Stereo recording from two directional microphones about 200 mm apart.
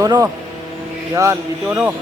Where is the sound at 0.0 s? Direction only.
15° right (ahead or behind).